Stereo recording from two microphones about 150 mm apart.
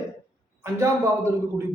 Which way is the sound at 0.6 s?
20° right (ahead or behind).